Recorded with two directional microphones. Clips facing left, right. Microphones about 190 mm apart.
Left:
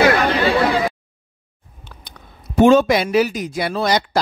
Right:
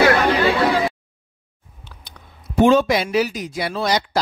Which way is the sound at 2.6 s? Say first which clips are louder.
Left 3 dB; 50° left (ahead or behind).